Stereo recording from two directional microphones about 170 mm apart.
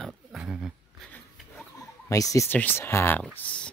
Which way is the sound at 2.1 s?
20° left (ahead or behind).